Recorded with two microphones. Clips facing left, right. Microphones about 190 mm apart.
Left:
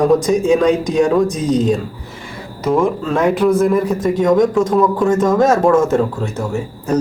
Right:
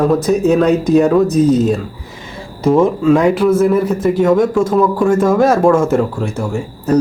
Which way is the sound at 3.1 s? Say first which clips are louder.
Right 3 dB; 10° right (ahead or behind).